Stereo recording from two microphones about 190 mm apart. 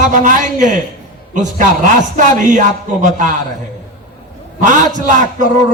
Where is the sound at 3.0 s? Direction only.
40° right (ahead or behind).